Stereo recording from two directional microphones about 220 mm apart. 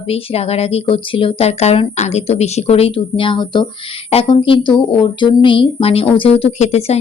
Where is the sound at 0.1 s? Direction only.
30° left (ahead or behind).